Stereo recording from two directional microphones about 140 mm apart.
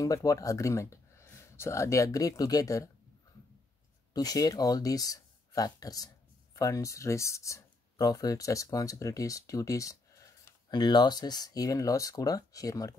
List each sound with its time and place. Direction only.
0.0 s speech: 25° left (ahead or behind)
4.1 s speech: 25° left (ahead or behind)